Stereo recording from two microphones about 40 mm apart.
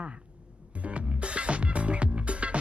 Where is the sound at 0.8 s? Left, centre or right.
Right.